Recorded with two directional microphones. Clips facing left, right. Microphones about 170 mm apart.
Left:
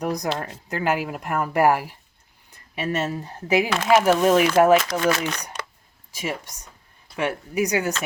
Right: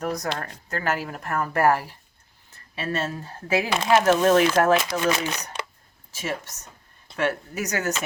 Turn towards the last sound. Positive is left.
turn(degrees=10)  # may be behind; listen again after turning